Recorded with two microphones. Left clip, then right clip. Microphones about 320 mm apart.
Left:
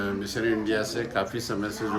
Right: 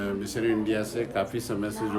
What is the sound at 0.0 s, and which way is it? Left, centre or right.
A man's voice, centre.